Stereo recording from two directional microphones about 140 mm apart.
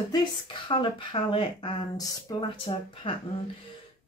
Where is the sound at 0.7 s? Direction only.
40° left (ahead or behind).